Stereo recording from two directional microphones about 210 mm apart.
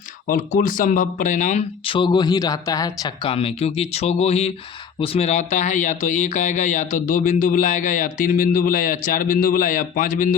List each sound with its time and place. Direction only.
0.3 s speech: 40° left (ahead or behind)